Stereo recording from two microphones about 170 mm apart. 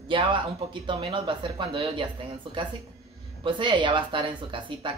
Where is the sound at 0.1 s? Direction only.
30° right (ahead or behind).